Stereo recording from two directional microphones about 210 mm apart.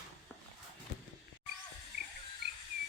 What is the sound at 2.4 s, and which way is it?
Music, 55° right (ahead or behind).